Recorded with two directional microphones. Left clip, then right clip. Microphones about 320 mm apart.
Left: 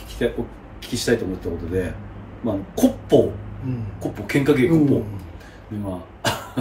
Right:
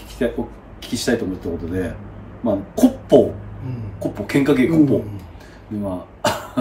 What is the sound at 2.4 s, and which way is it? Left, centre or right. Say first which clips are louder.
Speech: right 3 dB; centre.